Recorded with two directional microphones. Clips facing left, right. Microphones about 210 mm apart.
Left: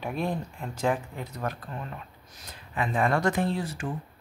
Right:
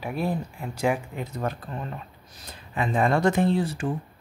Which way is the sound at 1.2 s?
25° right (ahead or behind).